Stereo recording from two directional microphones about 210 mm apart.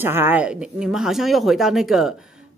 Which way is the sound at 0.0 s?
10° right (ahead or behind).